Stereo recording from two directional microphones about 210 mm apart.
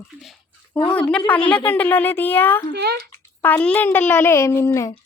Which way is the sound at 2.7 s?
50° right (ahead or behind).